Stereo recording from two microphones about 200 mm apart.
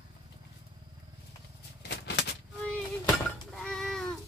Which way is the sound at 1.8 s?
60° left (ahead or behind).